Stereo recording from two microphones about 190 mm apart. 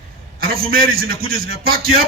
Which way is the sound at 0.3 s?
50° right (ahead or behind).